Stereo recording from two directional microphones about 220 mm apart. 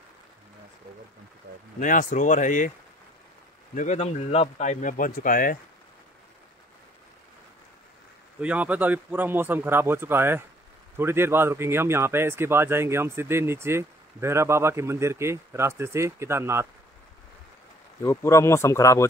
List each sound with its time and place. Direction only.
1.8 s speech: 35° left (ahead or behind)
3.7 s speech: 30° left (ahead or behind)
8.4 s speech: 5° right (ahead or behind)
18.0 s speech: 15° left (ahead or behind)